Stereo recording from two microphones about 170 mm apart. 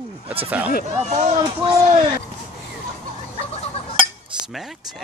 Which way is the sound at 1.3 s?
25° right (ahead or behind).